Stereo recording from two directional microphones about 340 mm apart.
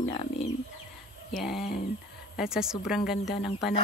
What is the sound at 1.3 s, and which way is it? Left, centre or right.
Speech, centre.